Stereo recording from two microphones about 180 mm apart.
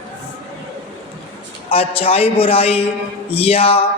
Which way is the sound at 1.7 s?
30° left (ahead or behind).